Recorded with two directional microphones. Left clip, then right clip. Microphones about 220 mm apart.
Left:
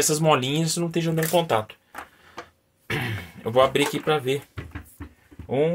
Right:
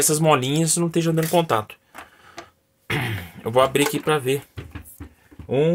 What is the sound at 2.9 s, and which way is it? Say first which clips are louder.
Speech: right 3 dB; 30° right (ahead or behind).